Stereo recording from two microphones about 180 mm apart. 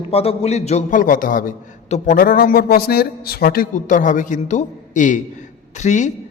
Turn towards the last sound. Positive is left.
turn(degrees=40)  # may be behind; listen again after turning